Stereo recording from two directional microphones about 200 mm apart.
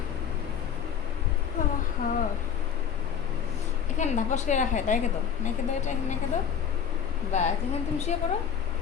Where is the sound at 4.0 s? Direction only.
35° left (ahead or behind).